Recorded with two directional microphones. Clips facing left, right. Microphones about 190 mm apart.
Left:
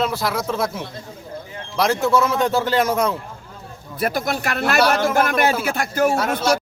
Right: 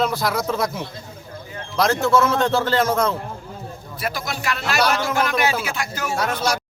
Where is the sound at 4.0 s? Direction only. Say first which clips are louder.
Left 6 dB; 50° left (ahead or behind).